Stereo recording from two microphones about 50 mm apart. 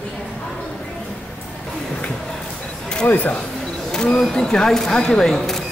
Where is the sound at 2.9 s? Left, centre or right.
Centre.